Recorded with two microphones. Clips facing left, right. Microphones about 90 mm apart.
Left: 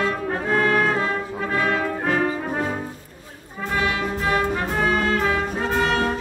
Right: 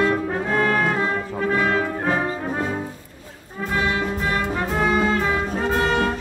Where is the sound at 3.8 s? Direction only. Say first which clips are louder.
Right 1 dB; 25° right (ahead or behind).